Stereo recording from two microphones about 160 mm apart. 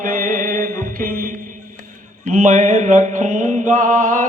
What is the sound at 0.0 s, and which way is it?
Mantra, 60° right (ahead or behind).